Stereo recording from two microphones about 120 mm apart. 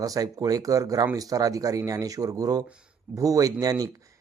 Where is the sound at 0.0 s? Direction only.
30° right (ahead or behind).